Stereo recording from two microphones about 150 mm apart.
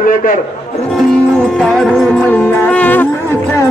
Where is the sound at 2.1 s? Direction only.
10° left (ahead or behind).